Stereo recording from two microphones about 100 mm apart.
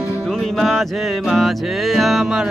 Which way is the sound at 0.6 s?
Centre (ahead or behind).